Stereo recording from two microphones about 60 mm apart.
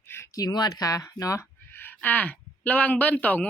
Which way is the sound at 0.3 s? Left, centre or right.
Left.